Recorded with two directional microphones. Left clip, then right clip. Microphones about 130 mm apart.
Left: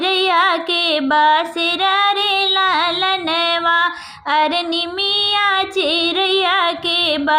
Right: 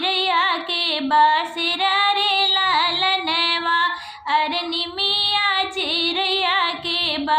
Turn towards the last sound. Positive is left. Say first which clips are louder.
# left 5 dB
turn(degrees=35)  # may be behind; listen again after turning